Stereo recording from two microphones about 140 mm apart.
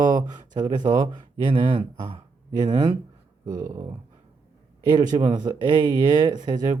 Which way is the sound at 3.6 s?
20° right (ahead or behind).